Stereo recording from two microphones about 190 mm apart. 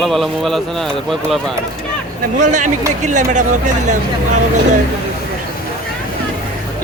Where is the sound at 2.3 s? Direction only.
40° right (ahead or behind).